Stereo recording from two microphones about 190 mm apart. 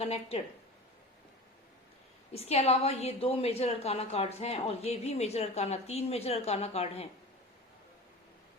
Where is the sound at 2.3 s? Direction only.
35° left (ahead or behind).